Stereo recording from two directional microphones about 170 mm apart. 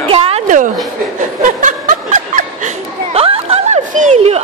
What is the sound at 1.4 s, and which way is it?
Snicker, 50° right (ahead or behind).